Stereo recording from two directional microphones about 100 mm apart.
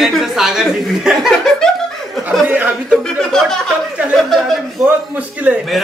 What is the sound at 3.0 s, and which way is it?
Speech, 5° left (ahead or behind).